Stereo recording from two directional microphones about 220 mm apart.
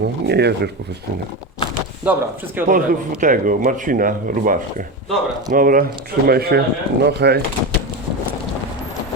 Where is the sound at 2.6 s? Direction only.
10° right (ahead or behind).